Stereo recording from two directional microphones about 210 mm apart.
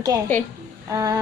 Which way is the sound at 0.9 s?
15° right (ahead or behind).